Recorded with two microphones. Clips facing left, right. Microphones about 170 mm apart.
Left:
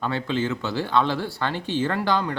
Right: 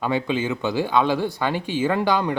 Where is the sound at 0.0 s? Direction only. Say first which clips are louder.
Right 2 dB; 15° right (ahead or behind).